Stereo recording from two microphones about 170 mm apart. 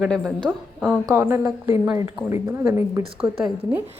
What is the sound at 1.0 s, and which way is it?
A woman's voice, 15° right (ahead or behind).